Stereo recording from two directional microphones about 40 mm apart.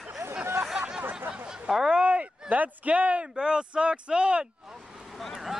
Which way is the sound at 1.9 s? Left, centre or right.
Right.